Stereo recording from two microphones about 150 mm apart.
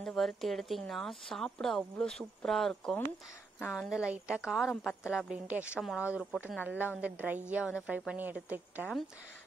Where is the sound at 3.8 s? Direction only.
5° right (ahead or behind).